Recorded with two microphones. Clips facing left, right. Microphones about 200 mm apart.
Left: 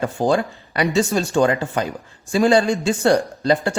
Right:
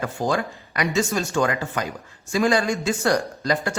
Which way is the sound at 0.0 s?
30° left (ahead or behind).